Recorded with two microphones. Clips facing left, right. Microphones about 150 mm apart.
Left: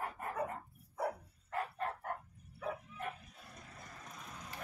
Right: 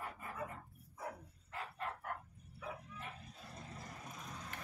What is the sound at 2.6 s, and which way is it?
Bow-wow, 50° left (ahead or behind).